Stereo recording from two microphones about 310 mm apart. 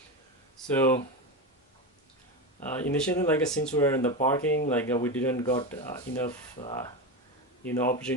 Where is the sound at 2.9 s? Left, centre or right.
Centre.